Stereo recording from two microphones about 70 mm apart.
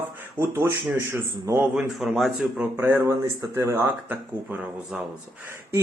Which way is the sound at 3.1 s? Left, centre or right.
Right.